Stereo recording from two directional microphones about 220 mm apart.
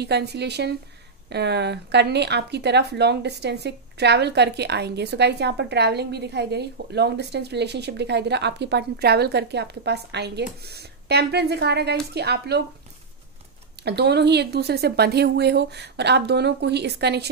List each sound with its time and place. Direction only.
0.0 s speech: 50° right (ahead or behind)
13.8 s speech: 50° right (ahead or behind)